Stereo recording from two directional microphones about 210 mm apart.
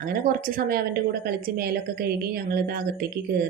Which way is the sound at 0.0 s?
40° right (ahead or behind).